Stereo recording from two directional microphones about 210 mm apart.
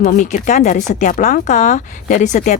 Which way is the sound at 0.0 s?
35° left (ahead or behind).